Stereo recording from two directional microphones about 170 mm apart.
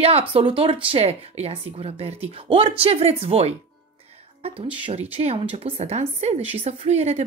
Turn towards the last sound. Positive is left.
turn(degrees=-40)  # may be behind; listen again after turning